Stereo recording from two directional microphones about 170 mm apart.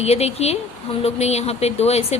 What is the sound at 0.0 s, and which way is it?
A woman's voice, 40° left (ahead or behind).